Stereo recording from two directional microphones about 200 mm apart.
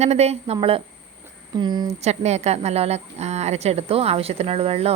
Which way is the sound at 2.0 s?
35° right (ahead or behind).